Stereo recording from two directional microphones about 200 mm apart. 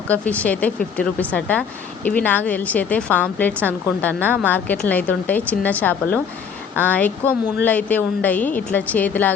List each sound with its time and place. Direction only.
0.1 s a woman's voice: 5° left (ahead or behind)